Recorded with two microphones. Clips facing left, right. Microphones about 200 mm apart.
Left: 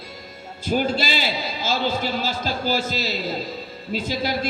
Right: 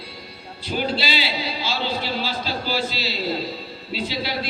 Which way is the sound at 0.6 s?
45° left (ahead or behind).